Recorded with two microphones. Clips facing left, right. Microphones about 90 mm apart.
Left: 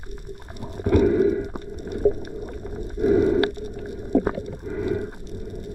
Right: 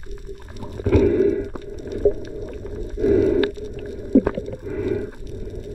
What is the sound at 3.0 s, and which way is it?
Stomach rumble, 15° left (ahead or behind).